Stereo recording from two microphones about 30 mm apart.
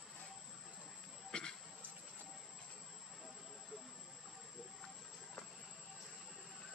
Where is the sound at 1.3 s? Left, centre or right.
Left.